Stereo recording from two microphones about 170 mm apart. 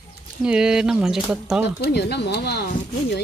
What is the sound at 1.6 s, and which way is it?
Speech, 75° left (ahead or behind).